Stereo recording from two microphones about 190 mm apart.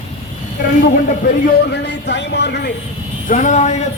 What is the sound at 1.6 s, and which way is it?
Speech, 60° left (ahead or behind).